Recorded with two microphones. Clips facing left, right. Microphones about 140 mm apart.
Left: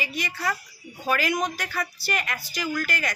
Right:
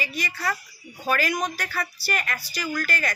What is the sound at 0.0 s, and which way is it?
A woman's voice, 20° left (ahead or behind).